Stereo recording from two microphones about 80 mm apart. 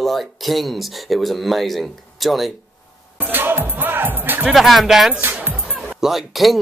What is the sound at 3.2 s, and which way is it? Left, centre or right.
Music, right.